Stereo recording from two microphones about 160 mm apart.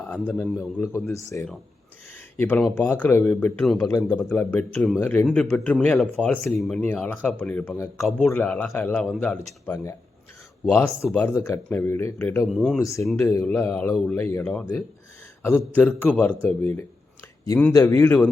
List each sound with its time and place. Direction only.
0.0 s speech: 10° left (ahead or behind)
5.5 s speech: 15° left (ahead or behind)
5.7 s speech: 5° left (ahead or behind)
12.5 s speech: centre (ahead or behind)
12.8 s speech: 20° left (ahead or behind)